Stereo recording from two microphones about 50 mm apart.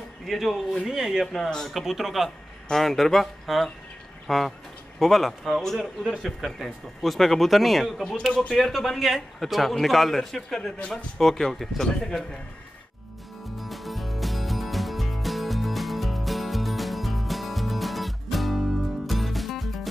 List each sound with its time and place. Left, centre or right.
0.2 s speech: centre
1.2 s a man's voice: centre
13.6 s music: centre